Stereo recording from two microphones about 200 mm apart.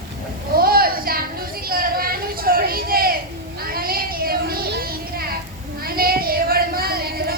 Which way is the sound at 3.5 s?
50° right (ahead or behind).